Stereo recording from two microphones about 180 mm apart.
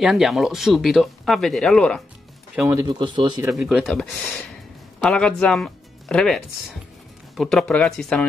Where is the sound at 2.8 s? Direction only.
25° right (ahead or behind).